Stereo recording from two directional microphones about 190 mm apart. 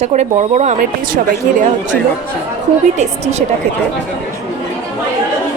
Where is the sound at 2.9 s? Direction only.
35° right (ahead or behind).